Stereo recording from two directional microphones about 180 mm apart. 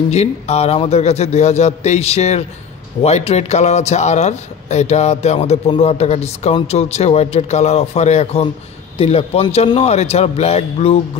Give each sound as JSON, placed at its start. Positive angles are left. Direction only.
{"t": 0.1, "sound": "a man's voice", "side_deg": 35}